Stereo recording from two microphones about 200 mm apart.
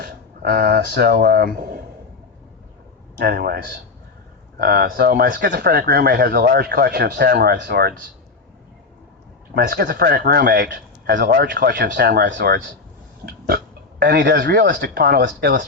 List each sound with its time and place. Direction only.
0.0 s speech: 50° right (ahead or behind)
3.2 s speech: 50° right (ahead or behind)
9.6 s speech: 50° right (ahead or behind)
14.0 s speech: 50° right (ahead or behind)